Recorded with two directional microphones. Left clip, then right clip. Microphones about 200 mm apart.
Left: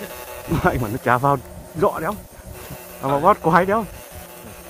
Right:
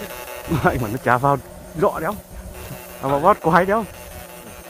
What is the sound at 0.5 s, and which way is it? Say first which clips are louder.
A man's voice: even; centre (ahead or behind).